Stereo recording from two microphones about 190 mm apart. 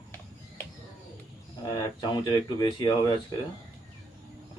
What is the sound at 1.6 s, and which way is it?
Speech, 20° left (ahead or behind).